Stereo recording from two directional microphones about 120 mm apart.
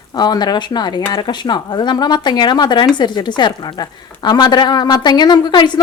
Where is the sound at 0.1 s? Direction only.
35° left (ahead or behind).